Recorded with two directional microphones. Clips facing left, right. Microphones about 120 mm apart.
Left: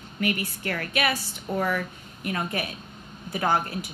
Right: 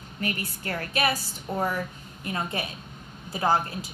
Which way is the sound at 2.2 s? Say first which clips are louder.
Left 2 dB; 25° right (ahead or behind).